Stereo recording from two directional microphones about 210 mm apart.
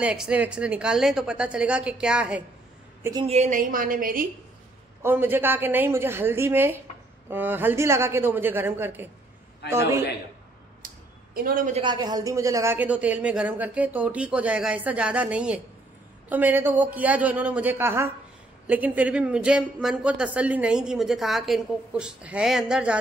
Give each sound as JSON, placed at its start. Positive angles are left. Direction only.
{"t": 0.0, "sound": "speech", "side_deg": -5}
{"t": 3.0, "sound": "a woman's voice", "side_deg": -15}
{"t": 3.3, "sound": "a woman's voice", "side_deg": -35}
{"t": 5.0, "sound": "a woman's voice", "side_deg": -10}
{"t": 11.3, "sound": "a woman's voice", "side_deg": -45}
{"t": 11.8, "sound": "a woman's voice", "side_deg": -20}